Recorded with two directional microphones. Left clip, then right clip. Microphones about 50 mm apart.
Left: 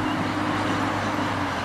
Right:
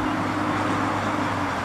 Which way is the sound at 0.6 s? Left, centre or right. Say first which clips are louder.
Right 1 dB; left.